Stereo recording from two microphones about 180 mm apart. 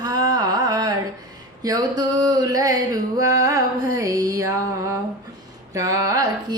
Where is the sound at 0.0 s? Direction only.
20° right (ahead or behind).